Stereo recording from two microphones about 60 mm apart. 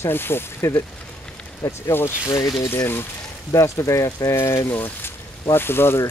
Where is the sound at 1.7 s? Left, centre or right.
Left.